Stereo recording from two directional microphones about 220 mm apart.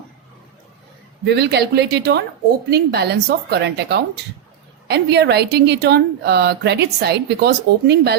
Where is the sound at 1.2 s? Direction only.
50° right (ahead or behind).